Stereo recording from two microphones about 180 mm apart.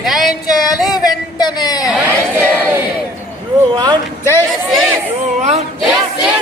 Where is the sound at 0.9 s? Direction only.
20° left (ahead or behind).